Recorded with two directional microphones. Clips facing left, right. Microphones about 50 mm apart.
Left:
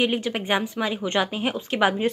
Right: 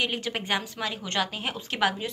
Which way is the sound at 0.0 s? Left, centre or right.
Centre.